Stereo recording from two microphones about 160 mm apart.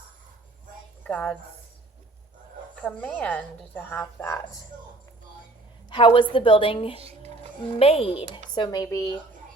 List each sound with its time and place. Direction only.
1.0 s a woman's voice: 5° left (ahead or behind)
2.8 s a woman's voice: 10° left (ahead or behind)
5.9 s a woman's voice: 30° left (ahead or behind)
7.0 s a sound: 45° right (ahead or behind)
7.8 s a woman's voice: 35° left (ahead or behind)
8.5 s speech: 25° left (ahead or behind)